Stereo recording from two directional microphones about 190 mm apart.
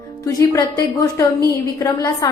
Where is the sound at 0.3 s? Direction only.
20° left (ahead or behind).